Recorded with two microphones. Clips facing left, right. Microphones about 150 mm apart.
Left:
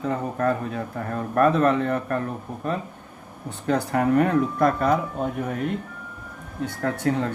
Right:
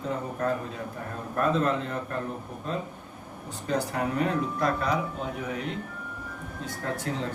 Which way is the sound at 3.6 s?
60° left (ahead or behind).